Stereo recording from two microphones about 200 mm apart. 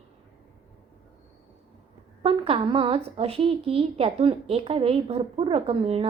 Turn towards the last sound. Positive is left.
turn(degrees=-30)  # may be behind; listen again after turning